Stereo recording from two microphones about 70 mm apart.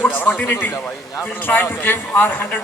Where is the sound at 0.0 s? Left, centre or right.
Left.